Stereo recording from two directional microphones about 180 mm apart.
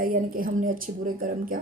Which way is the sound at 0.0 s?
50° right (ahead or behind).